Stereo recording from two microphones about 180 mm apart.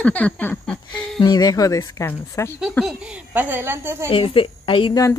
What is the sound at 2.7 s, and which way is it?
A woman's voice, 5° right (ahead or behind).